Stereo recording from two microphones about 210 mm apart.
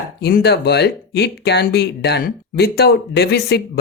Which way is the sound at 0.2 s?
50° left (ahead or behind).